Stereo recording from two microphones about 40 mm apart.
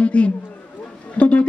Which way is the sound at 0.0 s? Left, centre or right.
Left.